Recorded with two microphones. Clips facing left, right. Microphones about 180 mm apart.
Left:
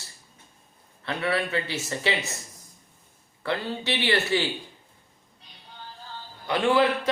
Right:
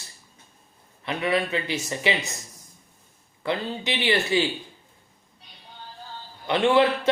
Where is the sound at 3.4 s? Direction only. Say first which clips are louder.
Right 1 dB; 15° right (ahead or behind).